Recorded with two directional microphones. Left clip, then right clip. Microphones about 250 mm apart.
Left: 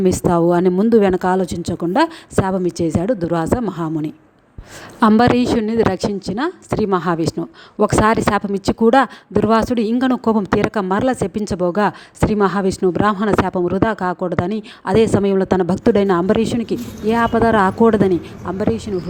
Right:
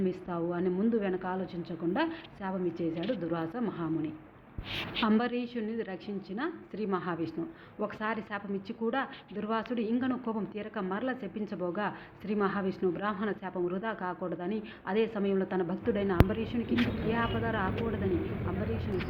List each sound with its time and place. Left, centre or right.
0.0 s a woman's voice: left